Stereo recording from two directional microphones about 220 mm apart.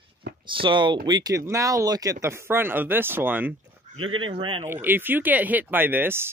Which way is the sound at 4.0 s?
65° right (ahead or behind).